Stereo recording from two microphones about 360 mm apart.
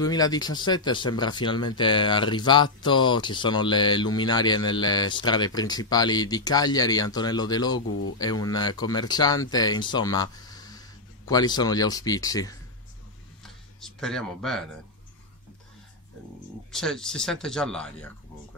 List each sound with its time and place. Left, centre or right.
0.0 s speech: centre
7.8 s speech: left
8.2 s speech: centre
13.4 s a sound: centre
16.7 s speech: centre